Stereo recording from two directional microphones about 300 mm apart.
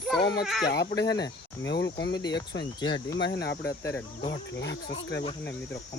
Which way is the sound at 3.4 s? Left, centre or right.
Left.